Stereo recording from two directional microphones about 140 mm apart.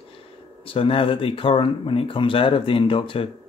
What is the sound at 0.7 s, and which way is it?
Speech, 40° left (ahead or behind).